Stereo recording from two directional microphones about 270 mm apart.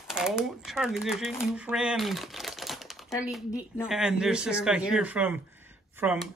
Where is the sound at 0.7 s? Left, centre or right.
Centre.